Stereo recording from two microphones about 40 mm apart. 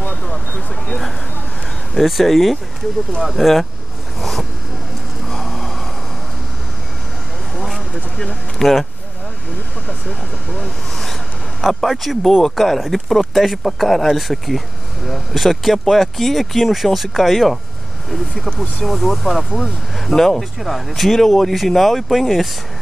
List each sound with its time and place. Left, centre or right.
0.1 s speech: left
2.0 s speech: centre
4.2 s a sound: centre
7.5 s vehicle: centre
8.5 s speech: centre
10.6 s speech: centre